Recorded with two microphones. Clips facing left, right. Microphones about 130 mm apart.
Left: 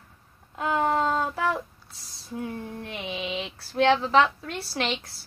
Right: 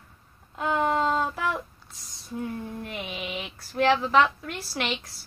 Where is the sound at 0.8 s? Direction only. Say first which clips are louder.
Even; 30° left (ahead or behind).